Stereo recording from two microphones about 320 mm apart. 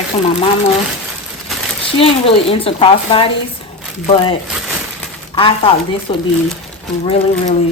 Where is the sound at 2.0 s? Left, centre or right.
Centre.